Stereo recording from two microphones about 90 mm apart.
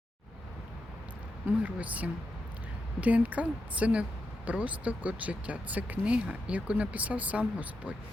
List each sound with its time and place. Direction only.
1.5 s speech: 15° right (ahead or behind)